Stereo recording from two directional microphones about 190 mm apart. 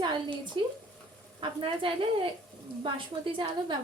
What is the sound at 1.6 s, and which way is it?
Speech, 25° right (ahead or behind).